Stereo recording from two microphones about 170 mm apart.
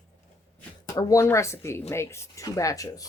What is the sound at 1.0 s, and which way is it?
Speech, 20° left (ahead or behind).